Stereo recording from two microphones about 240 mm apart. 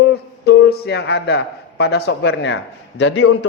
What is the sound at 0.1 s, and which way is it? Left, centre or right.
A man's voice, left.